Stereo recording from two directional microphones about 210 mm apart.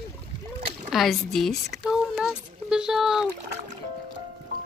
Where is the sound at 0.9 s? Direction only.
Centre (ahead or behind).